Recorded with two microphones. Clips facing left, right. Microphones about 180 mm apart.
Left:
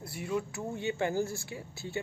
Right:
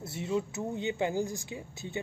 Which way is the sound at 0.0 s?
25° right (ahead or behind).